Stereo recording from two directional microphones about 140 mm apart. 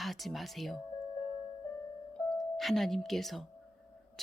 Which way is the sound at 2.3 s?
Centre (ahead or behind).